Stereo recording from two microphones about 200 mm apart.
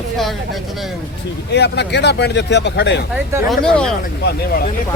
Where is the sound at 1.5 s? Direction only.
55° left (ahead or behind).